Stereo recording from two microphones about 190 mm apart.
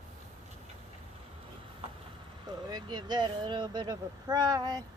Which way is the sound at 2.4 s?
20° right (ahead or behind).